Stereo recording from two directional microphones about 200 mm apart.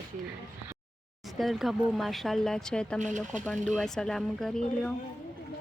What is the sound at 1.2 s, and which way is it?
Speech, centre (ahead or behind).